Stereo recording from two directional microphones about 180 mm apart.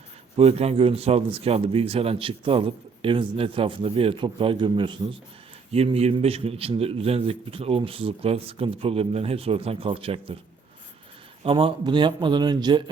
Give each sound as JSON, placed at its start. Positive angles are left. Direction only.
{"t": 0.3, "sound": "a man's voice", "side_deg": -35}
{"t": 11.4, "sound": "a man's voice", "side_deg": -30}